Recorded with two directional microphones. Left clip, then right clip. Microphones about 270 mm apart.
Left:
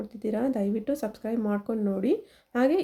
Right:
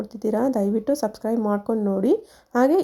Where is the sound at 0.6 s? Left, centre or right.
Centre.